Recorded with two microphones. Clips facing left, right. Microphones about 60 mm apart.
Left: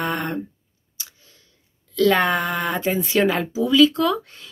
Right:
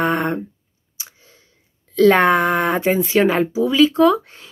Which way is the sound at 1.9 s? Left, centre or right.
Right.